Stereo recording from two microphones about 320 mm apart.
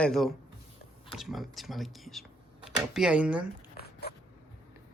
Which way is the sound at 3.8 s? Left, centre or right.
Left.